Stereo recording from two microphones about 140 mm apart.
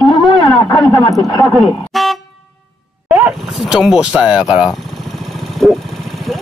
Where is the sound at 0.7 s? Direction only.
30° left (ahead or behind).